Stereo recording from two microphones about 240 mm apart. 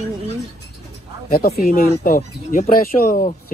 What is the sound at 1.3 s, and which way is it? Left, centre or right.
Speech, left.